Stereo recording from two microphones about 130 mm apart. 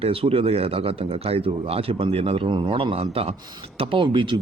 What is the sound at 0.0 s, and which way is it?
Speech, 50° right (ahead or behind).